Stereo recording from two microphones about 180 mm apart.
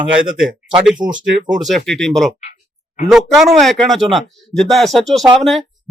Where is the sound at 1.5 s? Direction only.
Centre (ahead or behind).